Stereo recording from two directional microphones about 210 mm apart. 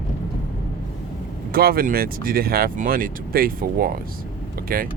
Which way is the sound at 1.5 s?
45° right (ahead or behind).